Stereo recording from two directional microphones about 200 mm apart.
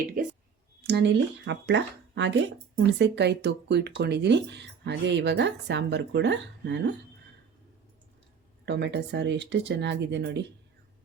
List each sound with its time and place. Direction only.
0.8 s speech: 55° right (ahead or behind)
8.6 s speech: 60° right (ahead or behind)